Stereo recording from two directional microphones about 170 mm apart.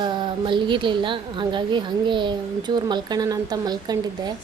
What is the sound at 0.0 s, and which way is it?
A woman's voice, 25° right (ahead or behind).